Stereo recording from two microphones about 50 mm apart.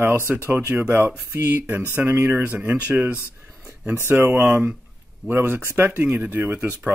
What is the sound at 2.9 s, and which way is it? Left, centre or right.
Speech, right.